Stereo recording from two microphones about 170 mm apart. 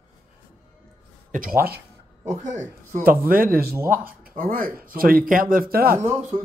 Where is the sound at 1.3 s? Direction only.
55° right (ahead or behind).